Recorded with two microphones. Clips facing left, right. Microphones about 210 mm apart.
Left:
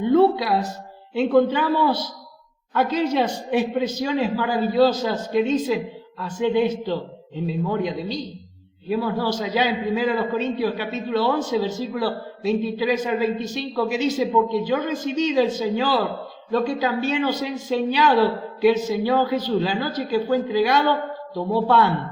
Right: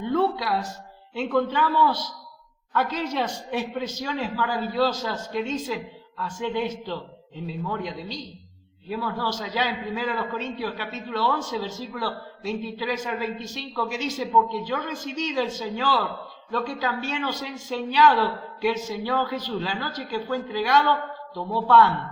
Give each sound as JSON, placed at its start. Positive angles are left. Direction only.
{"t": 0.0, "sound": "a man's voice", "side_deg": 25}
{"t": 3.6, "sound": "a man's voice", "side_deg": 15}
{"t": 5.2, "sound": "speech", "side_deg": 15}
{"t": 5.5, "sound": "a man's voice", "side_deg": 25}